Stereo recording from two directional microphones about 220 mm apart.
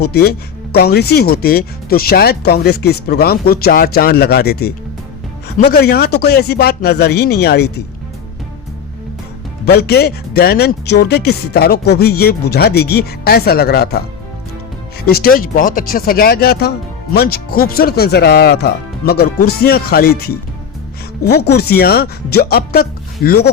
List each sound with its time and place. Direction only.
0.0 s speech: 45° left (ahead or behind)
5.7 s speech: 45° left (ahead or behind)
9.6 s speech: 45° left (ahead or behind)
15.0 s speech: 45° left (ahead or behind)